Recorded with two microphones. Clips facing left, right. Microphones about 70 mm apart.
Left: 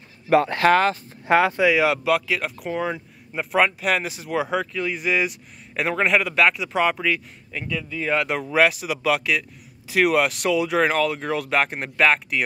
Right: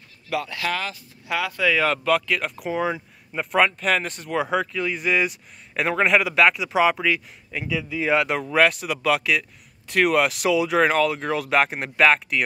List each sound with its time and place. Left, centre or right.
0.3 s speech: left
1.6 s speech: centre